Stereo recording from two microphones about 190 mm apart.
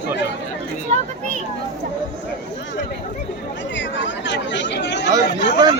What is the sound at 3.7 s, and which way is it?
Speech, 70° left (ahead or behind).